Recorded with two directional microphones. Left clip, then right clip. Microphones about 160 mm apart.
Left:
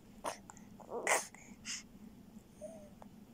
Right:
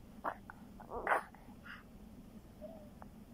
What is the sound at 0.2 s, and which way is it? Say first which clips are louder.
Dog: right 1 dB; 30° left (ahead or behind).